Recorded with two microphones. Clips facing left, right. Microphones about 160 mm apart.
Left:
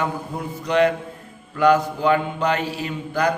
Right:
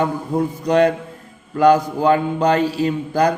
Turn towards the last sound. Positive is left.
turn(degrees=-35)  # may be behind; listen again after turning